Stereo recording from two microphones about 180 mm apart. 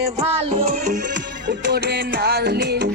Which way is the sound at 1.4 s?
70° right (ahead or behind).